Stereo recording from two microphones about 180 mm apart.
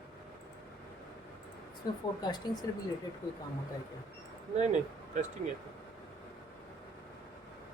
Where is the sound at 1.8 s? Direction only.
20° left (ahead or behind).